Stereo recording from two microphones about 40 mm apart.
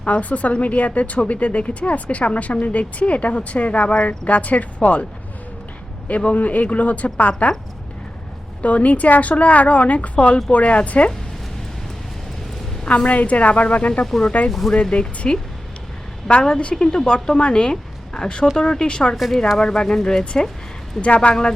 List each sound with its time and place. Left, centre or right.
0.0 s speech: left
4.3 s speech: left
6.1 s speech: left
8.6 s speech: left
12.9 s speech: left
14.0 s speech: centre
14.7 s a woman's voice: left
16.3 s a woman's voice: centre
19.1 s speech: centre
19.5 s speech: centre
21.0 s a woman's voice: left